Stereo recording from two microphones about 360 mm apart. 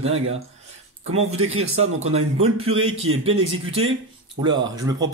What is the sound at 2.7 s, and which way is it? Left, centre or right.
Speech, right.